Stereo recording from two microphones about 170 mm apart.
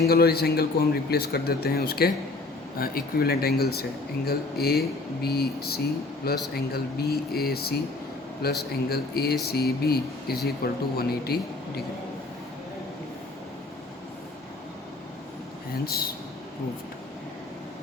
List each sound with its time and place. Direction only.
0.0 s a man's voice: 65° left (ahead or behind)